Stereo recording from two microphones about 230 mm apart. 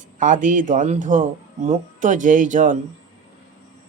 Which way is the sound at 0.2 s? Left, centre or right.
Right.